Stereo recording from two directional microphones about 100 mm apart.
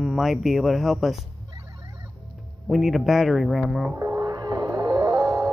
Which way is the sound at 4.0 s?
35° right (ahead or behind).